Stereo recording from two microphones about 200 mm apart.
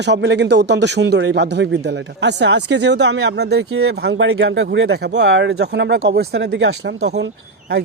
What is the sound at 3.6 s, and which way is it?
Speech, 90° right.